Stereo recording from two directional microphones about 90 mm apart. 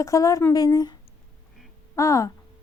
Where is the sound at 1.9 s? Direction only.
35° left (ahead or behind).